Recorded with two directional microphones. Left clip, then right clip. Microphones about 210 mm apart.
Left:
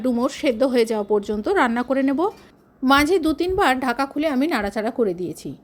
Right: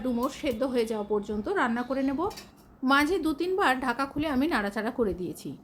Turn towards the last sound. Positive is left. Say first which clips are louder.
# left 7 dB
turn(degrees=25)  # may be behind; listen again after turning